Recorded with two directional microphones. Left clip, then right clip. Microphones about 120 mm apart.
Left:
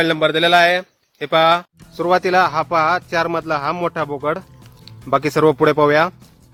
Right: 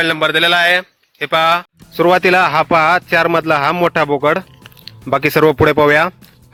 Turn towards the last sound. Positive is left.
turn(degrees=-40)  # may be behind; listen again after turning